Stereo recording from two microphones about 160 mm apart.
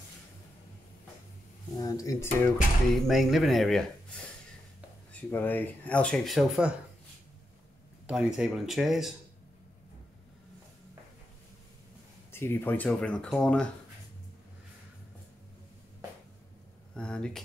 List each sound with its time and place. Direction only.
1.8 s speech: 20° left (ahead or behind)
2.9 s speech: centre (ahead or behind)
5.3 s speech: 10° left (ahead or behind)
8.1 s speech: 5° right (ahead or behind)
12.3 s speech: 15° left (ahead or behind)
16.9 s a sound: 5° left (ahead or behind)